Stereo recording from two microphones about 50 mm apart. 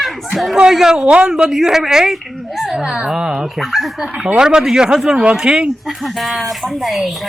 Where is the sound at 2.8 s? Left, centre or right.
Centre.